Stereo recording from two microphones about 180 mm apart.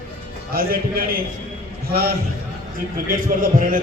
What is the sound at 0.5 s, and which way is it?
A man's voice, 55° right (ahead or behind).